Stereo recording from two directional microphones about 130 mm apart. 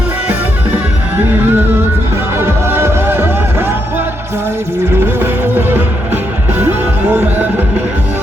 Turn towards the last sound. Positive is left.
turn(degrees=-15)  # may be behind; listen again after turning